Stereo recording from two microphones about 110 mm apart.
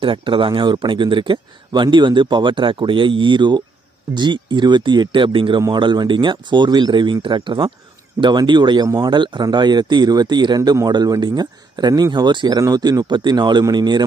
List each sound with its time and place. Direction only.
0.0 s speech: 50° right (ahead or behind)